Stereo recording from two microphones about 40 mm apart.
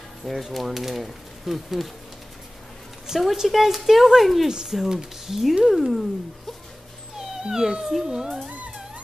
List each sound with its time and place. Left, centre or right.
0.2 s speech: centre
3.3 s speech: centre
7.2 s cat: centre
8.0 s speech: centre